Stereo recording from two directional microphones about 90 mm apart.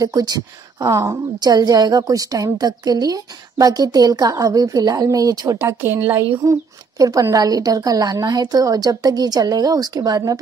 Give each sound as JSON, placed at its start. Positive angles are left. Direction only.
{"t": 0.0, "sound": "a woman's voice", "side_deg": -50}
{"t": 5.6, "sound": "a woman's voice", "side_deg": -25}
{"t": 6.4, "sound": "a woman's voice", "side_deg": -35}